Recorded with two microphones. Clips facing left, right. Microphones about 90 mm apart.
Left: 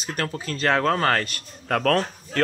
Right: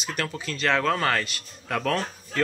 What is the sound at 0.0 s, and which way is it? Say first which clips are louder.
A man's voice: left 2 dB; 40° left (ahead or behind).